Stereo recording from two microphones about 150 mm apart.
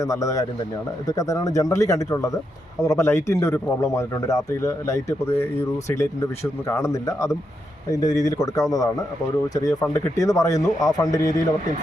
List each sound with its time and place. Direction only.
0.0 s speech: 20° left (ahead or behind)
6.7 s speech: 20° left (ahead or behind)